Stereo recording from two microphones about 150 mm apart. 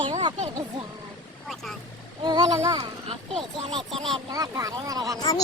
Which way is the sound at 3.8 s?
Centre (ahead or behind).